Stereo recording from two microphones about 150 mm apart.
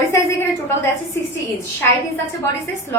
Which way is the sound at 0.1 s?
20° left (ahead or behind).